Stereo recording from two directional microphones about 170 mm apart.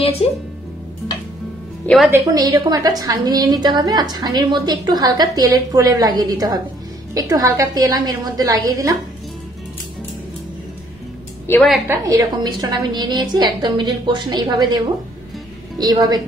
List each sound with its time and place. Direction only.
2.0 s a woman's voice: 20° right (ahead or behind)
11.5 s a woman's voice: 15° left (ahead or behind)
11.9 s a woman's voice: 20° right (ahead or behind)
15.8 s a woman's voice: 25° right (ahead or behind)